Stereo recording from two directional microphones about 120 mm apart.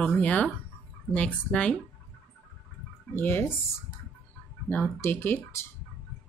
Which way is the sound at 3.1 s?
20° left (ahead or behind).